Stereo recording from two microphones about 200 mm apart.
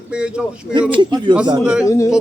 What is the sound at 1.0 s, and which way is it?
Speech, 20° right (ahead or behind).